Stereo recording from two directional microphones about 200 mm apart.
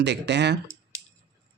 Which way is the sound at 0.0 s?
60° right (ahead or behind).